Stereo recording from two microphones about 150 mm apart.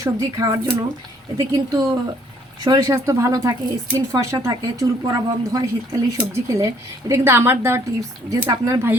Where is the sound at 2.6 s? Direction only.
20° right (ahead or behind).